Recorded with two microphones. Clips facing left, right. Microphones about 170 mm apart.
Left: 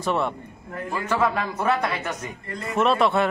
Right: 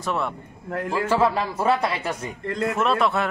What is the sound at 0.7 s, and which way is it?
Speech, 90° right.